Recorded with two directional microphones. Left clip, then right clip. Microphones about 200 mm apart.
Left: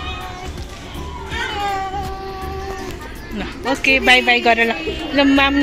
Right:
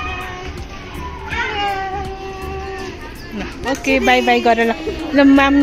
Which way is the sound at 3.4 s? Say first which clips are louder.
Left 1 dB; 10° right (ahead or behind).